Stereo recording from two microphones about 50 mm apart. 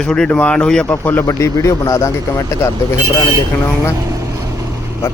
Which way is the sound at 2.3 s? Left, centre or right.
Left.